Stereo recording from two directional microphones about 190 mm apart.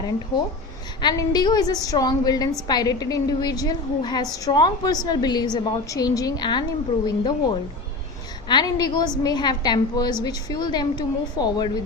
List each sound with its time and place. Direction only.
1.0 s a woman's voice: 20° left (ahead or behind)